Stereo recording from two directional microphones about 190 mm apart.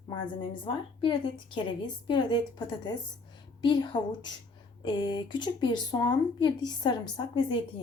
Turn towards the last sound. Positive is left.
turn(degrees=25)  # may be behind; listen again after turning